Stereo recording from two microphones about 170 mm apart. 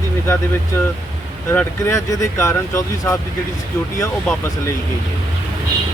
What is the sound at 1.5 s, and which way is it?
Speech, 15° left (ahead or behind).